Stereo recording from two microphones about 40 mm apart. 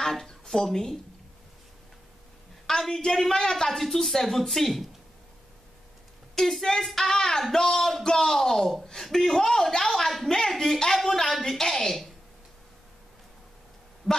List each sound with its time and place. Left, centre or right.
0.0 s a woman's voice: centre
2.7 s a woman's voice: centre
6.3 s a woman's voice: centre
14.0 s a sound: right